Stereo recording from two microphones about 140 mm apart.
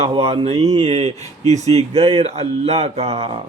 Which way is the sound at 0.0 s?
45° right (ahead or behind).